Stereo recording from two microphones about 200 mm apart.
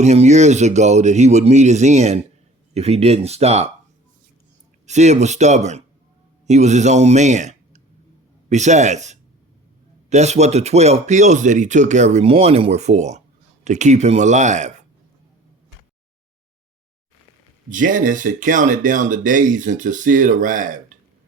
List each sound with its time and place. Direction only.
0.0 s speech: 35° right (ahead or behind)
4.9 s speech: 35° right (ahead or behind)
17.7 s speech: 40° right (ahead or behind)